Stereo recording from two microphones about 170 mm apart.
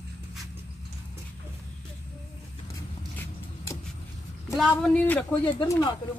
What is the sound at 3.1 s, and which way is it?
Vehicle, 15° left (ahead or behind).